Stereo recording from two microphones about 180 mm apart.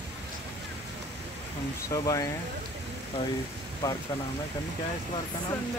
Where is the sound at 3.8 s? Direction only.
20° left (ahead or behind).